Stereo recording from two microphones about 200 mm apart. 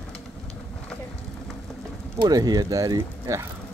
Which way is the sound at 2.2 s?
20° right (ahead or behind).